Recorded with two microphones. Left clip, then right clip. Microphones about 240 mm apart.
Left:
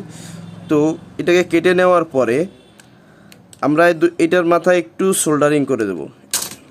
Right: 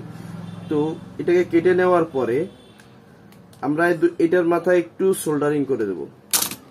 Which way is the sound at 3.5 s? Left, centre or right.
Left.